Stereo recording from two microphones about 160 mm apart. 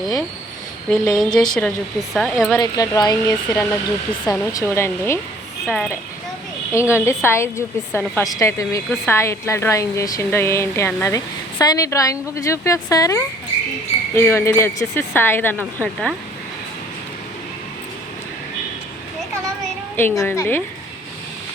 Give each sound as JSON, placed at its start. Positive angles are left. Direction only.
{"t": 0.9, "sound": "speech", "side_deg": 5}
{"t": 2.6, "sound": "a woman's voice", "side_deg": 20}
{"t": 5.6, "sound": "speech", "side_deg": 0}
{"t": 6.9, "sound": "a woman's voice", "side_deg": 15}
{"t": 20.0, "sound": "a woman's voice", "side_deg": 15}